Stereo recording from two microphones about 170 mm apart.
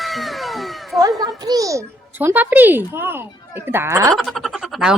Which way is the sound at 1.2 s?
20° right (ahead or behind).